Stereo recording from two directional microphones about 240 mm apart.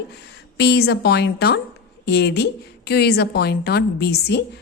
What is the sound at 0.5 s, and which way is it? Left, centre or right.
A woman's voice, left.